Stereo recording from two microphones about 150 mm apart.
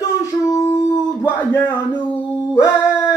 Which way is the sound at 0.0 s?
20° left (ahead or behind).